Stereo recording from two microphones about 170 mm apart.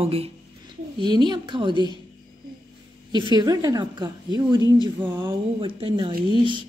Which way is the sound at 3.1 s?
25° right (ahead or behind).